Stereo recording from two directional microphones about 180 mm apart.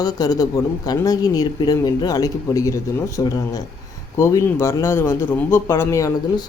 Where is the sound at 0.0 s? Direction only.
20° left (ahead or behind).